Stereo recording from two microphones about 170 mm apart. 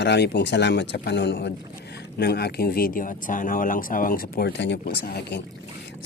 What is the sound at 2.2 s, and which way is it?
A man's voice, 70° left (ahead or behind).